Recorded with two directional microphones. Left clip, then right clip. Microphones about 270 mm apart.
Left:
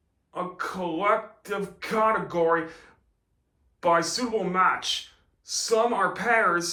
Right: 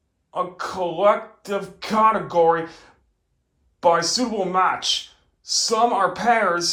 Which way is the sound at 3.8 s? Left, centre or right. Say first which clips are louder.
Right 5 dB; right.